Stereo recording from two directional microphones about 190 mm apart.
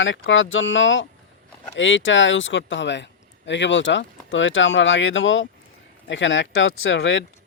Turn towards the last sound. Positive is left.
turn(degrees=85)